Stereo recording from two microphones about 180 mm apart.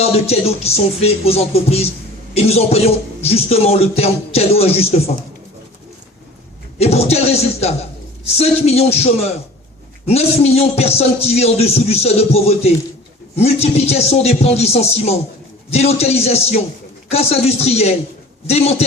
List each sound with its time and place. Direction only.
0.0 s a man's voice: 35° left (ahead or behind)
6.7 s a man's voice: 35° left (ahead or behind)
10.1 s a man's voice: 35° left (ahead or behind)